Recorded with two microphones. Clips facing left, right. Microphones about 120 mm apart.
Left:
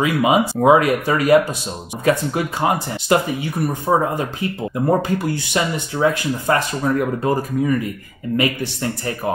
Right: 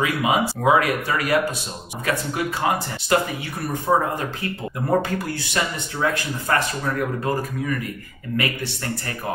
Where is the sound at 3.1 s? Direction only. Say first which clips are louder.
Left 4 dB; 20° left (ahead or behind).